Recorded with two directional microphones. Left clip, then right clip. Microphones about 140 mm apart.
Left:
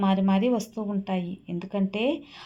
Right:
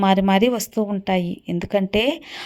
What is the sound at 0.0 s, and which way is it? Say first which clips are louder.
Speech: right 8 dB; 50° right (ahead or behind).